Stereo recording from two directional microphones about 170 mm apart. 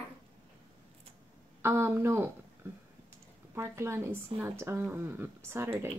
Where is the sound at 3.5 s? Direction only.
15° right (ahead or behind).